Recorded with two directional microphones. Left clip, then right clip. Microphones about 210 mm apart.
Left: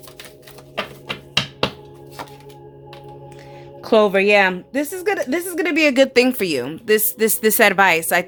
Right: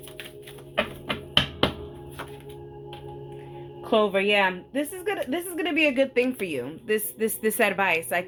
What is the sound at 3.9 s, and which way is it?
Speech, 45° left (ahead or behind).